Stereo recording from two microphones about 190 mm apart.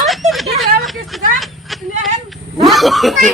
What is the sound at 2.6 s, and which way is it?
Speech, centre (ahead or behind).